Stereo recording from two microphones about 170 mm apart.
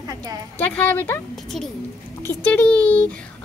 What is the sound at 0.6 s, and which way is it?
Speech, 10° left (ahead or behind).